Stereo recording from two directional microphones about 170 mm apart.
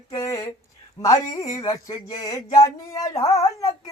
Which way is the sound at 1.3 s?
35° left (ahead or behind).